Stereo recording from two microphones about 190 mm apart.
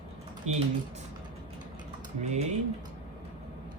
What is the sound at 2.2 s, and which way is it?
Speech, 35° right (ahead or behind).